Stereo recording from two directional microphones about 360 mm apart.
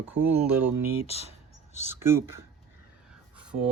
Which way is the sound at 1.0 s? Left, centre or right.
Centre.